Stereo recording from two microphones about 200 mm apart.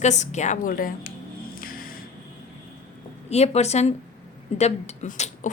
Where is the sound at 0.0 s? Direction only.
35° left (ahead or behind).